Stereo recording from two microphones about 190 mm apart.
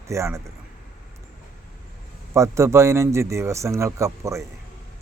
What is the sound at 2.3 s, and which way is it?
Speech, 15° right (ahead or behind).